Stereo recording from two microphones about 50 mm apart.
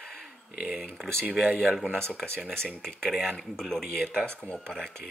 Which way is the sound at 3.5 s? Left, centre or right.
Centre.